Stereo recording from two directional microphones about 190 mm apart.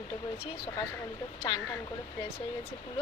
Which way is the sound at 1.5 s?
25° left (ahead or behind).